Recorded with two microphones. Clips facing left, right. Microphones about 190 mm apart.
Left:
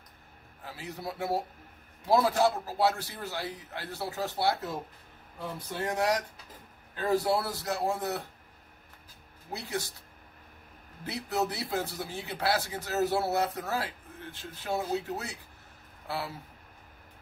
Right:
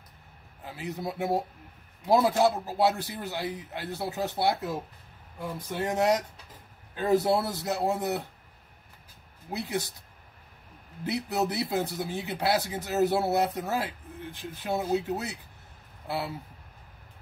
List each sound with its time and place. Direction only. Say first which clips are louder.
0.7 s speech: right 4 dB; 20° right (ahead or behind)
5.9 s speech: right 4 dB; 20° right (ahead or behind)
9.5 s speech: right 4 dB; 20° right (ahead or behind)
11.1 s speech: right 3 dB; 15° right (ahead or behind)